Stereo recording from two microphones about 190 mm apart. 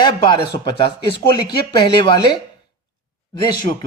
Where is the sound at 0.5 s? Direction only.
25° left (ahead or behind).